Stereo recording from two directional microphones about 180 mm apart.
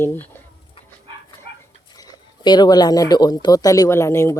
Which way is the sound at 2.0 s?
20° left (ahead or behind).